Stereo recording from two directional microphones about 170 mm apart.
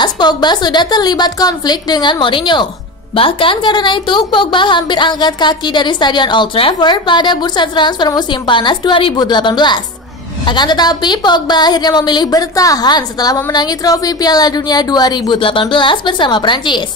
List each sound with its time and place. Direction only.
0.0 s a woman's voice: 25° left (ahead or behind)